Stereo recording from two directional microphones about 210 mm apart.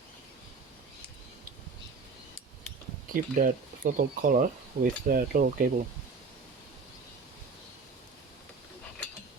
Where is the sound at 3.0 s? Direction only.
40° right (ahead or behind).